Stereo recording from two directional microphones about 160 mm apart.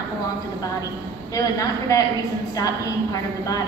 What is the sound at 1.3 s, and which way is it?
A woman's voice, 20° left (ahead or behind).